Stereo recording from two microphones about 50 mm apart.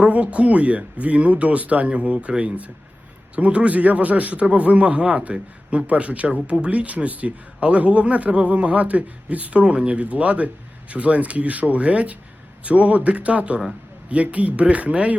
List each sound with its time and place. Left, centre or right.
0.0 s speech: right